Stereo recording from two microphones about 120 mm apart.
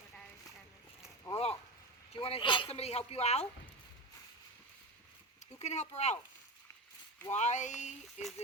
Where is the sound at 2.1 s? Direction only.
50° left (ahead or behind).